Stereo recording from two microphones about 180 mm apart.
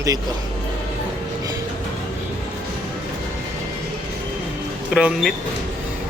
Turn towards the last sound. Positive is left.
turn(degrees=-5)  # may be behind; listen again after turning